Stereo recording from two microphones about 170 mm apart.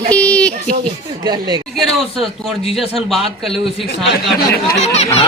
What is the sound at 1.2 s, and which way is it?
Speech, 25° right (ahead or behind).